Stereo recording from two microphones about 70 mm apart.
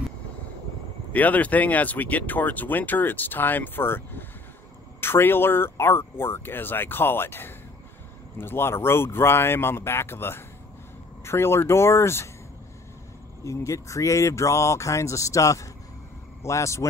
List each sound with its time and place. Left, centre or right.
1.1 s speech: left
13.4 s speech: left